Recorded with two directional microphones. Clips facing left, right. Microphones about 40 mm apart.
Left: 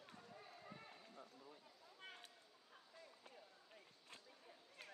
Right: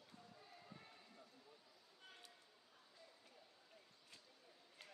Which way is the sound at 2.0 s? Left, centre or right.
Left.